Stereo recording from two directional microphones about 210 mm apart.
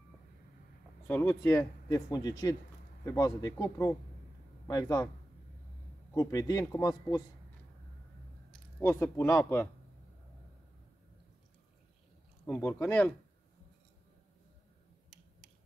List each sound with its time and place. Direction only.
1.0 s speech: 10° left (ahead or behind)
6.1 s speech: 15° left (ahead or behind)
8.5 s speech: 5° left (ahead or behind)
12.4 s speech: 5° left (ahead or behind)